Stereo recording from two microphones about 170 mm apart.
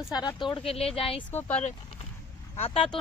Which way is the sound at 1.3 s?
10° left (ahead or behind).